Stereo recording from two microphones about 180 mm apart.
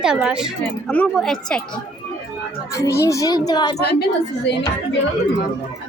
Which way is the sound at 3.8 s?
65° left (ahead or behind).